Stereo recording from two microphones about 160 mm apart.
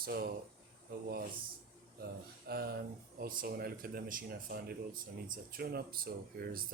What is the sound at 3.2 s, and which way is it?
Speech, 65° right (ahead or behind).